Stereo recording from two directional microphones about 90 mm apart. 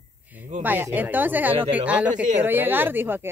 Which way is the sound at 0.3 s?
20° right (ahead or behind).